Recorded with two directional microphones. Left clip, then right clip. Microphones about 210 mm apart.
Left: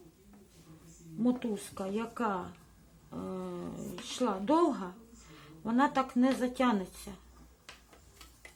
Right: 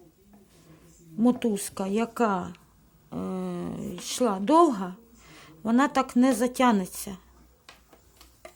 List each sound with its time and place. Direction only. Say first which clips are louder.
1.2 s speech: right 8 dB; 45° right (ahead or behind)